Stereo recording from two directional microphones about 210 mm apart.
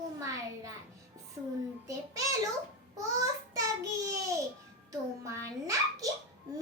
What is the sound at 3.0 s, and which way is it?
A child's voice, 15° right (ahead or behind).